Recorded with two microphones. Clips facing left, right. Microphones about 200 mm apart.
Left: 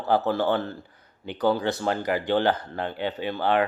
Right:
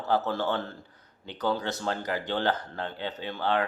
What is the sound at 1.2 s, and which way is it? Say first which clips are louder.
Speech: left 6 dB; 10° left (ahead or behind).